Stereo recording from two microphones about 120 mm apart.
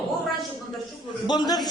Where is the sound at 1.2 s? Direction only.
35° left (ahead or behind).